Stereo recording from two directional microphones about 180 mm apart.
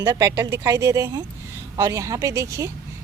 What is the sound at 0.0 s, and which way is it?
Speech, 20° right (ahead or behind).